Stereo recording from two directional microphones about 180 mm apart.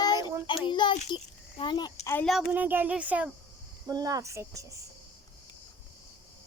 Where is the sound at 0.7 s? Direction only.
25° left (ahead or behind).